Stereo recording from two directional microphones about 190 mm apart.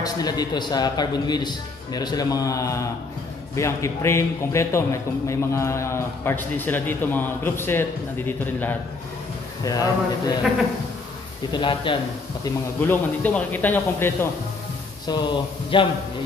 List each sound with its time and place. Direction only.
0.0 s a man's voice: 20° left (ahead or behind)
11.5 s speech: 25° left (ahead or behind)
12.8 s a man's voice: 10° left (ahead or behind)
15.0 s speech: 25° left (ahead or behind)